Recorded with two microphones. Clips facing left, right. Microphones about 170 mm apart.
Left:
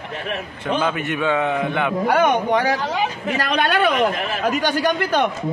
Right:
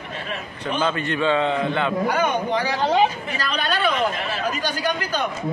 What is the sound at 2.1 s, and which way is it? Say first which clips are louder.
Speech: left 4 dB; 60° left (ahead or behind).